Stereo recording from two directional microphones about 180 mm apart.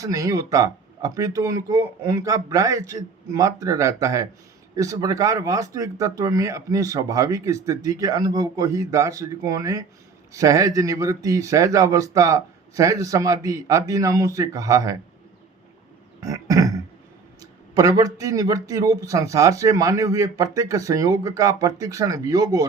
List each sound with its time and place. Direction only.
0.0 s speech: 20° right (ahead or behind)
16.2 s burping: 20° right (ahead or behind)
17.4 s speech: 20° right (ahead or behind)